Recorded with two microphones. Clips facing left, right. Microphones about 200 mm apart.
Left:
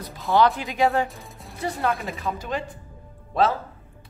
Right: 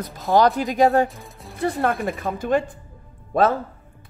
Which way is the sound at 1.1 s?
Centre (ahead or behind).